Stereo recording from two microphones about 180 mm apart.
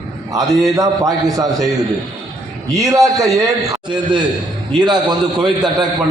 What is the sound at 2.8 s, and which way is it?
A man's voice, 20° right (ahead or behind).